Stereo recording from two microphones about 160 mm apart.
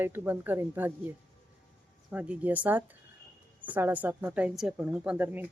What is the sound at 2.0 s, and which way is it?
Speech, 10° right (ahead or behind).